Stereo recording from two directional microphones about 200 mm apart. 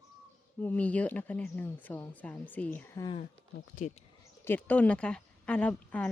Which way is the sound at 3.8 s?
40° left (ahead or behind).